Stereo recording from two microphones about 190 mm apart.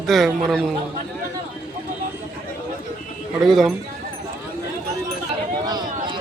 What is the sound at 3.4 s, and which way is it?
Speech, centre (ahead or behind).